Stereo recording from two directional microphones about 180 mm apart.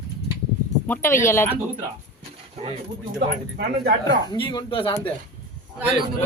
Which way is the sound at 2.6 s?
40° right (ahead or behind).